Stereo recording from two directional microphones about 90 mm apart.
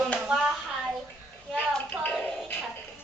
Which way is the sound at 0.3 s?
10° right (ahead or behind).